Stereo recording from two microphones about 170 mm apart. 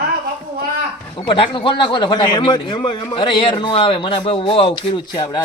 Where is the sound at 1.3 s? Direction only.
30° left (ahead or behind).